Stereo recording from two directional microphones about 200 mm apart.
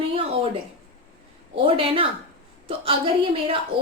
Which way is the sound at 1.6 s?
25° right (ahead or behind).